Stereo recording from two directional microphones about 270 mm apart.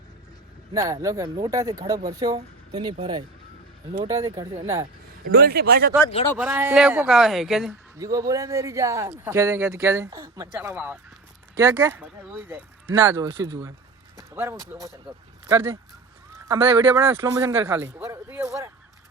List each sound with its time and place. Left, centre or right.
0.7 s speech: centre
5.3 s a man's voice: right
6.3 s speech: centre
7.9 s speech: centre
14.2 s a sound: centre
15.4 s a man's voice: centre